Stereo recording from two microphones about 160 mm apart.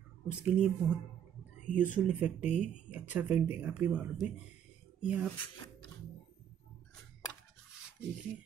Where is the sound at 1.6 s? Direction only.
55° left (ahead or behind).